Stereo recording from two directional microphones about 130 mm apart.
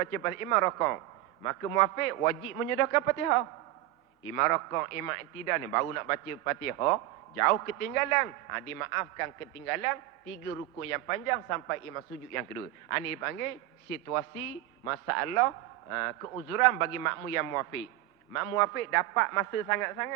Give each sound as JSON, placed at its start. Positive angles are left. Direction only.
{"t": 0.0, "sound": "a man's voice", "side_deg": 25}